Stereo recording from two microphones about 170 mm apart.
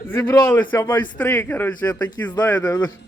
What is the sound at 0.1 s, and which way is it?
Speech, 15° left (ahead or behind).